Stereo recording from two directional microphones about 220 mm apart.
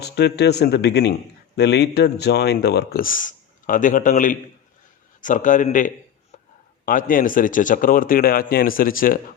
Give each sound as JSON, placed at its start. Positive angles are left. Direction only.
{"t": 0.0, "sound": "speech", "side_deg": 50}